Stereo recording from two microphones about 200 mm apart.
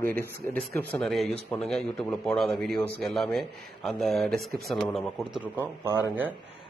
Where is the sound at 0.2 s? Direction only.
10° left (ahead or behind).